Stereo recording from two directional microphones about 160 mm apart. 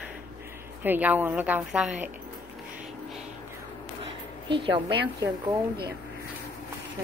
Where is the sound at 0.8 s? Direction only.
10° right (ahead or behind).